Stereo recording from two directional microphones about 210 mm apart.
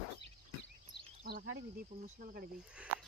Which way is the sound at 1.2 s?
40° right (ahead or behind).